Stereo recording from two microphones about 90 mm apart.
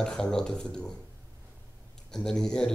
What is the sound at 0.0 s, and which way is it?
Speech, 5° left (ahead or behind).